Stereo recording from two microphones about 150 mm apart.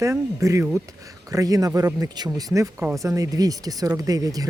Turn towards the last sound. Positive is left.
turn(degrees=-25)  # may be behind; listen again after turning